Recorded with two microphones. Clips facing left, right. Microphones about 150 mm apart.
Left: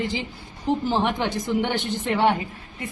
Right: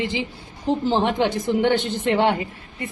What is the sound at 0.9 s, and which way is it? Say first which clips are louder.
Speech: right 3 dB; 20° right (ahead or behind).